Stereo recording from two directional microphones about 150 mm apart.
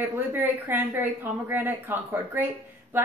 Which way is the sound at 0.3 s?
15° right (ahead or behind).